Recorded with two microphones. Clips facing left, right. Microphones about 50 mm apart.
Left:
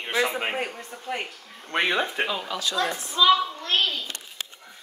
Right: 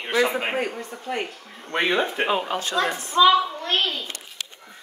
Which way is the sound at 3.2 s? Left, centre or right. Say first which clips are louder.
Right 3 dB; centre.